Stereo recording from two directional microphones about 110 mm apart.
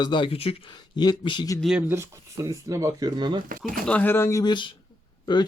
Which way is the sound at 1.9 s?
25° right (ahead or behind).